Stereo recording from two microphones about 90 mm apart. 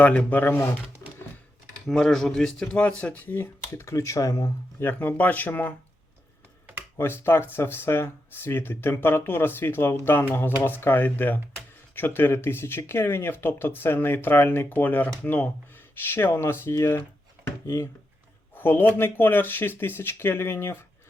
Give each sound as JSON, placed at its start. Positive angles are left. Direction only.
{"t": 0.0, "sound": "speech", "side_deg": 15}
{"t": 1.0, "sound": "a sound", "side_deg": 35}
{"t": 1.9, "sound": "speech", "side_deg": 5}
{"t": 4.8, "sound": "speech", "side_deg": 20}
{"t": 6.9, "sound": "speech", "side_deg": 30}
{"t": 18.5, "sound": "speech", "side_deg": 25}